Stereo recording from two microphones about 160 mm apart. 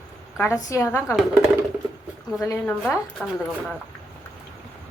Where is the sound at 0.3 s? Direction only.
20° left (ahead or behind).